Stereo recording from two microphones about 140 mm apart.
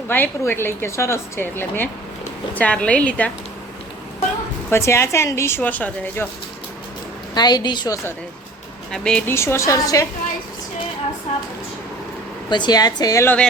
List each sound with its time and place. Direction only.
0.1 s a woman's voice: 15° left (ahead or behind)
4.7 s a woman's voice: 20° left (ahead or behind)
7.3 s a woman's voice: 30° left (ahead or behind)
8.9 s a woman's voice: 5° left (ahead or behind)
9.3 s speech: 20° left (ahead or behind)
12.5 s speech: 30° left (ahead or behind)
13.2 s a woman's voice: 10° left (ahead or behind)